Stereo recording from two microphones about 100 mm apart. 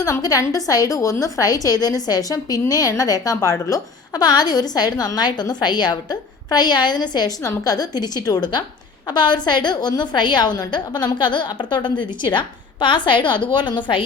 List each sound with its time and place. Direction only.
0.0 s a woman's voice: 35° left (ahead or behind)